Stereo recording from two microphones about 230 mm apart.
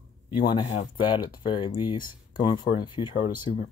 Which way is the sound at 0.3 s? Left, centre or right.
Centre.